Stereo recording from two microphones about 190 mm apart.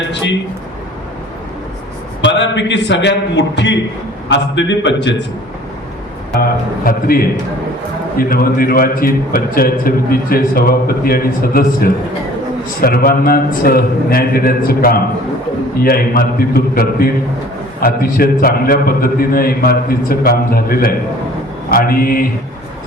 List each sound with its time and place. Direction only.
2.2 s a man's voice: 70° left (ahead or behind)
6.4 s a man's voice: 50° left (ahead or behind)